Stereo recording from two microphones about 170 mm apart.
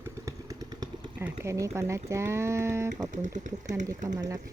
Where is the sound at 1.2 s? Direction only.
15° right (ahead or behind).